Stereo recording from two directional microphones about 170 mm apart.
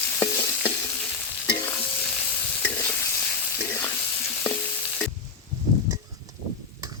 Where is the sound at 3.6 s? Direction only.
15° left (ahead or behind).